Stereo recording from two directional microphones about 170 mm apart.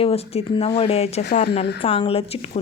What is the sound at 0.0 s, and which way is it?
Speech, 35° left (ahead or behind).